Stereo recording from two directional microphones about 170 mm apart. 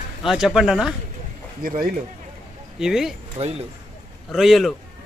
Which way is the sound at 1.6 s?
60° right (ahead or behind).